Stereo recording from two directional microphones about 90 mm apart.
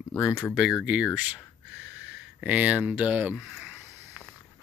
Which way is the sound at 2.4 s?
15° right (ahead or behind).